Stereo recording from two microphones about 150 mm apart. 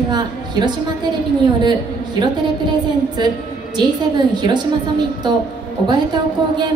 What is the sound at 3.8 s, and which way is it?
Speech, 30° right (ahead or behind).